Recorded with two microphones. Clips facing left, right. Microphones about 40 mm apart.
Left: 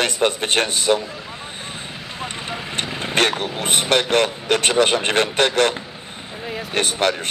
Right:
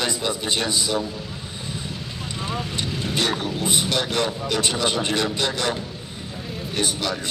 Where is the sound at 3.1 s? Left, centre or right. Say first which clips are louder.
Left 5 dB; left.